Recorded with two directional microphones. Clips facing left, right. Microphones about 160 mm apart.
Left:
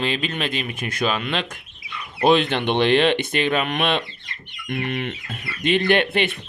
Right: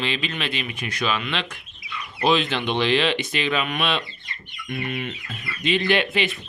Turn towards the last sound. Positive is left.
turn(degrees=55)  # may be behind; listen again after turning